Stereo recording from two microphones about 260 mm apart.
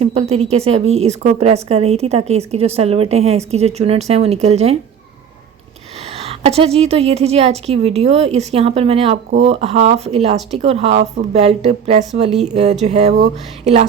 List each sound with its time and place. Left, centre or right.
0.0 s a woman's voice: right
6.1 s a woman's voice: right